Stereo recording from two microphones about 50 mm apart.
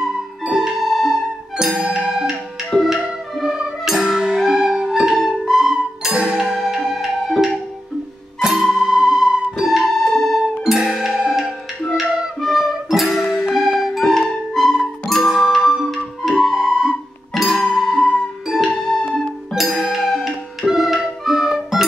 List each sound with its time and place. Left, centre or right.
0.5 s music: centre
1.9 s music: centre
2.9 s music: centre
6.1 s music: centre
6.6 s music: centre
9.6 s music: centre
10.6 s music: centre
11.9 s music: centre
15.2 s music: centre
15.5 s music: centre
17.8 s music: left
18.8 s music: centre
19.5 s music: centre